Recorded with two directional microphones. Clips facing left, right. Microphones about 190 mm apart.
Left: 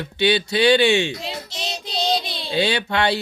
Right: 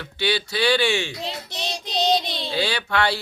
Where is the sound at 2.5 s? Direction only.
20° left (ahead or behind).